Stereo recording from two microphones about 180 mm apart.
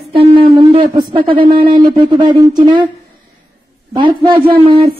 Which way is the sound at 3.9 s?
25° right (ahead or behind).